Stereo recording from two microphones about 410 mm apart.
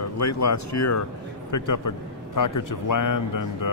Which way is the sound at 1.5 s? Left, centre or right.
Left.